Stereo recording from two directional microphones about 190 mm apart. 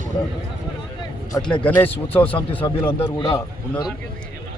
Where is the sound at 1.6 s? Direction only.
10° left (ahead or behind).